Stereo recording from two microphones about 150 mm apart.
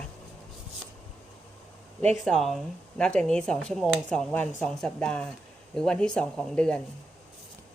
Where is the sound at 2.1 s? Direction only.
Centre (ahead or behind).